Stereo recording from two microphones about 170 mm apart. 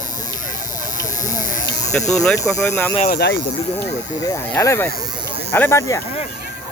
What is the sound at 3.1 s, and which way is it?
Speech, 80° left.